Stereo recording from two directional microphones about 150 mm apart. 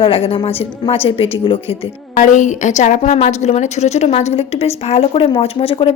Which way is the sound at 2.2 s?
55° left (ahead or behind).